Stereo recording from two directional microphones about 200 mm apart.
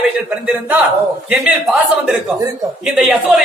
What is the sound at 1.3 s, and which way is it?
Speech, 5° right (ahead or behind).